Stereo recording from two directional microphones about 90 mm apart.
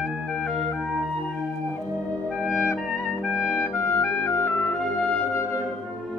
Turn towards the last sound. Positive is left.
turn(degrees=25)  # may be behind; listen again after turning